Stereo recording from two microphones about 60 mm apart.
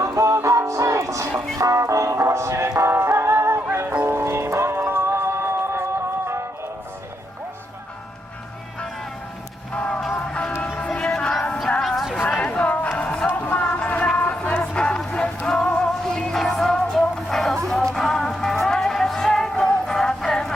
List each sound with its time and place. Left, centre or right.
0.0 s music: right
9.7 s music: left; by 12.1 s centre
12.3 s a sound: centre
13.0 s music: centre
14.2 s a sound: left
15.4 s music: centre